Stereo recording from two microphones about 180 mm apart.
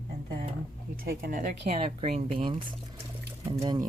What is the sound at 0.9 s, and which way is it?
Speech, 55° right (ahead or behind).